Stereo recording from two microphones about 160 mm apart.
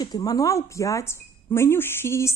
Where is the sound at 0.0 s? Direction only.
25° left (ahead or behind).